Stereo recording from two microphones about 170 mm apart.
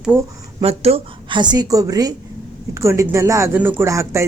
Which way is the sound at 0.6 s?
35° right (ahead or behind).